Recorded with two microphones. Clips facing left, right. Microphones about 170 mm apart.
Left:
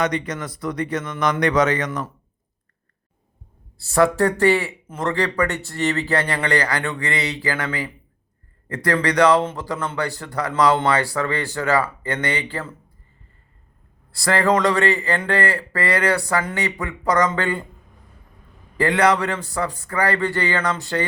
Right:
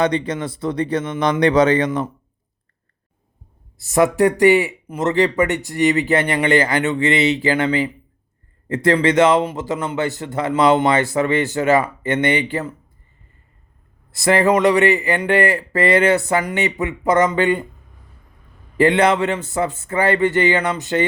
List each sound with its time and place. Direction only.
0.0 s speech: 30° right (ahead or behind)
3.8 s speech: 15° right (ahead or behind)
14.1 s speech: 20° right (ahead or behind)
18.8 s speech: 25° right (ahead or behind)